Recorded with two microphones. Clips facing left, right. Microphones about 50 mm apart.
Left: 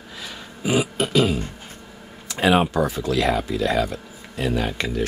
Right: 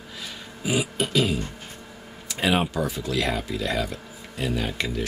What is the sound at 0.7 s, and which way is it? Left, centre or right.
Speech, left.